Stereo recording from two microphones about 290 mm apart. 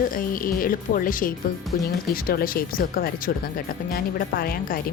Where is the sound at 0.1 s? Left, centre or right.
Left.